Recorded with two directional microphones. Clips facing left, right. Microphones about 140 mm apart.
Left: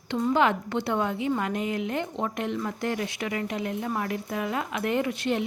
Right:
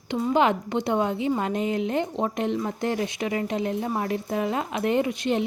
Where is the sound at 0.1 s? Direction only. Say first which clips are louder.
Right 2 dB; 15° right (ahead or behind).